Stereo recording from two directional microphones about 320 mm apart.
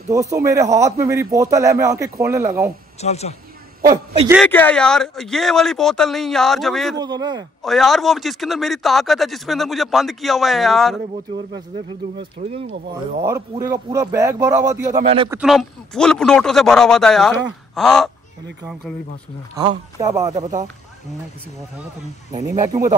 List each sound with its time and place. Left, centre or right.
0.1 s a man's voice: centre
3.0 s speech: centre
3.9 s a man's voice: centre
4.4 s speech: centre
7.0 s a man's voice: centre
7.6 s speech: centre
12.2 s a man's voice: centre
15.0 s speech: centre
15.2 s speech: centre
20.0 s a man's voice: centre
22.3 s a man's voice: centre